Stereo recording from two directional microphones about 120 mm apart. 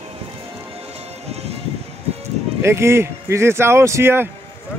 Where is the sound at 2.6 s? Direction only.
20° right (ahead or behind).